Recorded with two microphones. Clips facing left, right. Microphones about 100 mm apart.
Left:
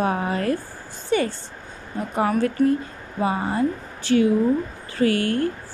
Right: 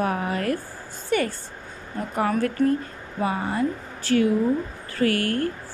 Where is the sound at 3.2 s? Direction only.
25° left (ahead or behind).